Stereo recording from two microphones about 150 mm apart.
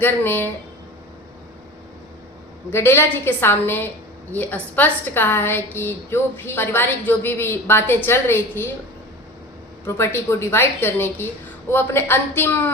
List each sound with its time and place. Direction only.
0.0 s a woman's voice: 15° left (ahead or behind)
2.7 s a woman's voice: 15° left (ahead or behind)
9.8 s a woman's voice: 15° left (ahead or behind)